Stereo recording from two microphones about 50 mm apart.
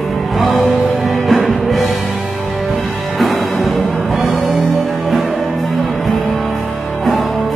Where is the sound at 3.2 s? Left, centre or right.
Centre.